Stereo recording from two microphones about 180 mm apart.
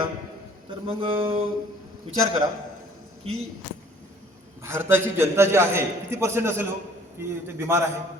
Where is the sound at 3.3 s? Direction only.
30° right (ahead or behind).